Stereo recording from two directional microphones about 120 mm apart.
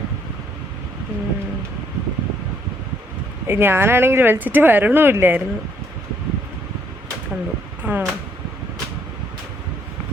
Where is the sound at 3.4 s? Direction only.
20° right (ahead or behind).